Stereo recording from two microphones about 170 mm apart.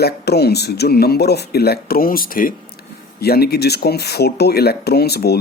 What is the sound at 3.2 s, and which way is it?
Speech, 65° left (ahead or behind).